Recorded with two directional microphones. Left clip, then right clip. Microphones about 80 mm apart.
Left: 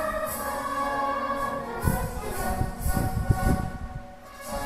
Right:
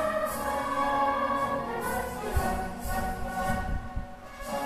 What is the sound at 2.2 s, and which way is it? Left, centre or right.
Music, centre.